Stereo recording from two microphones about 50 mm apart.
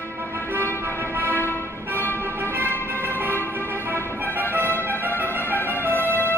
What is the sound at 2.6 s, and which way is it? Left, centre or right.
Music, left.